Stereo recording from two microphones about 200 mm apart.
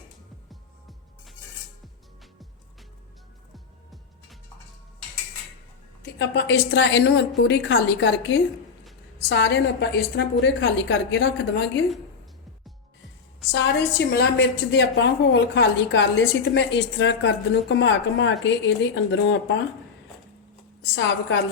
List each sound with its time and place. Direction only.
6.0 s a woman's voice: 60° left (ahead or behind)
13.5 s a woman's voice: 55° left (ahead or behind)
20.8 s a woman's voice: 60° left (ahead or behind)